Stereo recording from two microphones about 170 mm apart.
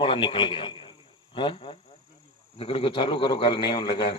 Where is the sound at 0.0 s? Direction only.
30° left (ahead or behind).